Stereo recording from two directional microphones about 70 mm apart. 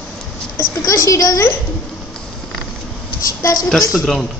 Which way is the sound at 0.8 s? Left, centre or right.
Left.